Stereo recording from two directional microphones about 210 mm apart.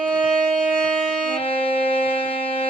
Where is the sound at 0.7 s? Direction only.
5° left (ahead or behind).